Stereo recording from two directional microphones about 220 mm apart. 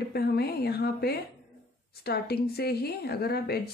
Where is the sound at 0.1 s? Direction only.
45° left (ahead or behind).